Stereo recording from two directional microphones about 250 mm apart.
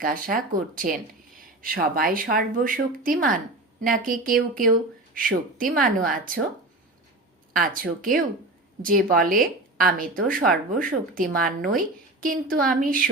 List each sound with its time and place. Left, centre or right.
0.0 s speech: right
7.5 s speech: right